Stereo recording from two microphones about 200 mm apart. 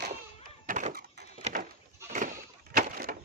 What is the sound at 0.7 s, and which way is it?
Wood, 40° right (ahead or behind).